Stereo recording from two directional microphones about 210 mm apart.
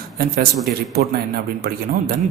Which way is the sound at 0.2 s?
45° right (ahead or behind).